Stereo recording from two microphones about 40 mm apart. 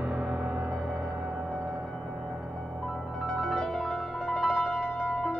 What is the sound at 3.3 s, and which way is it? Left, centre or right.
Music, centre.